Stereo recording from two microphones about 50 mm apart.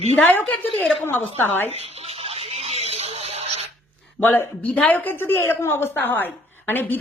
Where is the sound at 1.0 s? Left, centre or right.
Left.